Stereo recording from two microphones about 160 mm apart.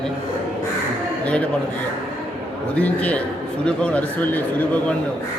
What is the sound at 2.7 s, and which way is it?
A man's voice, 10° left (ahead or behind).